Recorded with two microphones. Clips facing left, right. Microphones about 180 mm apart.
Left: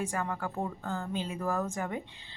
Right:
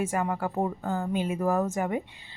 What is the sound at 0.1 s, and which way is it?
Speech, 15° right (ahead or behind).